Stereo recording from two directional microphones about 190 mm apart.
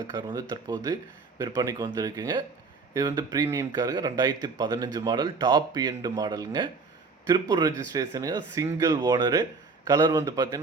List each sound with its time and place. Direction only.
0.1 s speech: 20° right (ahead or behind)